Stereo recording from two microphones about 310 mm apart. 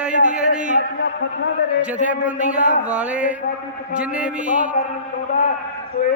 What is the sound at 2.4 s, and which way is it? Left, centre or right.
Speech, right.